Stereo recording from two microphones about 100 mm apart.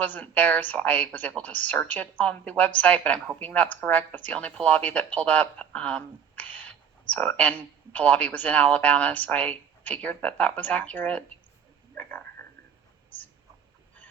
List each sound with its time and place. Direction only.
0.0 s speech: 15° left (ahead or behind)